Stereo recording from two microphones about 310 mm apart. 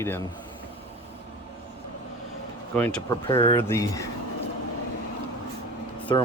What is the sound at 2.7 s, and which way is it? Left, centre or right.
Speech, centre.